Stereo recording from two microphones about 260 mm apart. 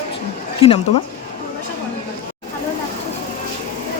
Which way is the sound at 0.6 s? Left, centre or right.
Left.